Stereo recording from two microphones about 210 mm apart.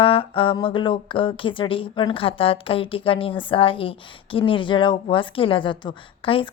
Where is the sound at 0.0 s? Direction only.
25° left (ahead or behind).